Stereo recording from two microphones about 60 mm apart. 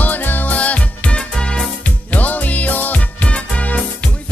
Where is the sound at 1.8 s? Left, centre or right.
Left.